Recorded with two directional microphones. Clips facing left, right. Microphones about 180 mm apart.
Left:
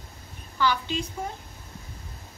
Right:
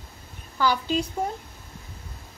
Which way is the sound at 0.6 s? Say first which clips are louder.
Right 2 dB; 40° right (ahead or behind).